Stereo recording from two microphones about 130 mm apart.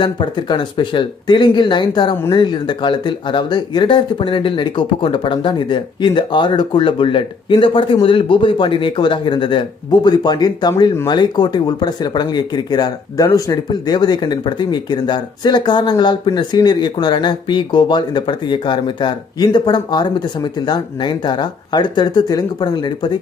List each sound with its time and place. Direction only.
0.0 s speech: 35° left (ahead or behind)